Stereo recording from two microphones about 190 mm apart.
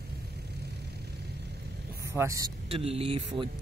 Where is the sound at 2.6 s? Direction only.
30° right (ahead or behind).